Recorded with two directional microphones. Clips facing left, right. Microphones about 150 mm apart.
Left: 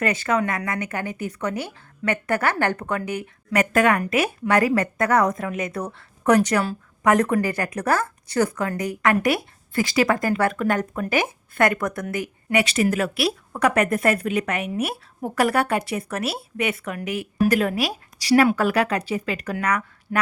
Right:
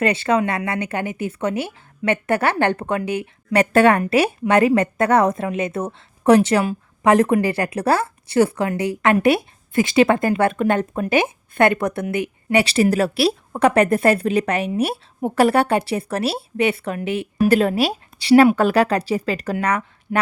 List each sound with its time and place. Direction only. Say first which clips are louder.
0.0 s speech: right 4 dB; 25° right (ahead or behind)
20.1 s speech: right 3 dB; 15° right (ahead or behind)